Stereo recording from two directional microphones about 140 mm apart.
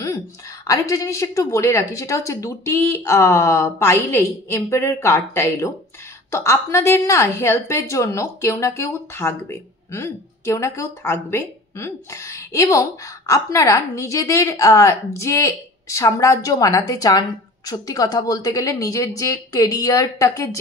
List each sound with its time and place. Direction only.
0.7 s a woman's voice: 25° left (ahead or behind)